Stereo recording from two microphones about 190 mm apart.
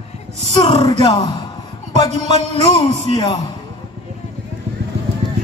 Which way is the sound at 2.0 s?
35° right (ahead or behind).